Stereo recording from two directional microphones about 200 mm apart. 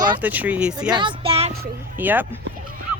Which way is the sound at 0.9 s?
25° right (ahead or behind).